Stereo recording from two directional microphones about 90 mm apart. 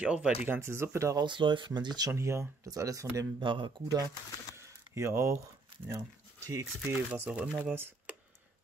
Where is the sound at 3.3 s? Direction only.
65° right (ahead or behind).